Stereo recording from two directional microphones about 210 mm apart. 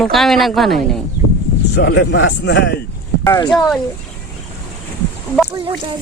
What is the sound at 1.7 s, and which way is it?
A man's voice, 55° left (ahead or behind).